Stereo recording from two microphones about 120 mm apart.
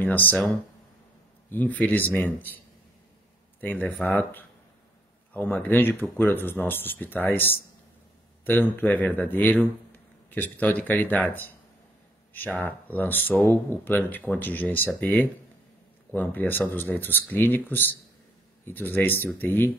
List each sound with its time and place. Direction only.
0.0 s speech: 15° left (ahead or behind)
1.5 s a man's voice: 15° left (ahead or behind)
3.6 s a man's voice: 15° left (ahead or behind)